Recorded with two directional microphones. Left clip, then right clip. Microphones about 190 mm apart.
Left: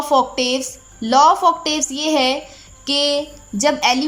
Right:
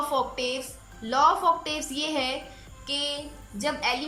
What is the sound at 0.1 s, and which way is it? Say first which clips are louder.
A woman's voice: left 11 dB; 40° left (ahead or behind).